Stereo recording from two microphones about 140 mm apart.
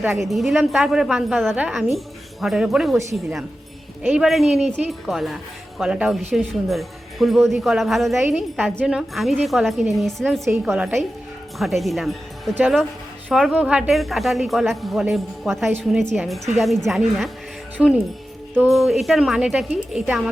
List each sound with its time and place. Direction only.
0.2 s speech: centre (ahead or behind)
4.0 s speech: 5° right (ahead or behind)
10.4 s a woman's voice: 20° right (ahead or behind)
10.8 s a woman's voice: 5° right (ahead or behind)